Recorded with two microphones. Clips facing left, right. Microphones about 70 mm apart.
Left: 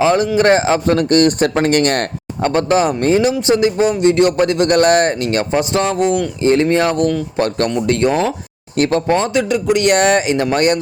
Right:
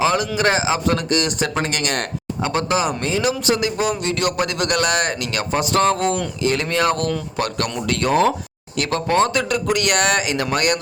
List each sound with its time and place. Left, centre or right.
0.0 s speech: left
3.2 s speech: left
6.4 s speech: left
8.8 s speech: left